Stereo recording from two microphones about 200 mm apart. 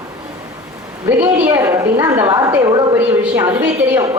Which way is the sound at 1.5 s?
15° right (ahead or behind).